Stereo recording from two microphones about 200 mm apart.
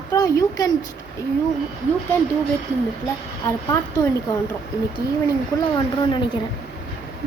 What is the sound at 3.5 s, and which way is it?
Speech, 15° left (ahead or behind).